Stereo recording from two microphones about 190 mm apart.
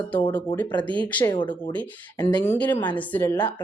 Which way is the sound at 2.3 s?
10° left (ahead or behind).